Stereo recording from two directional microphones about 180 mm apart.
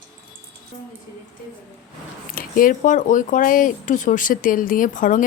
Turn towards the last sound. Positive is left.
turn(degrees=45)  # may be behind; listen again after turning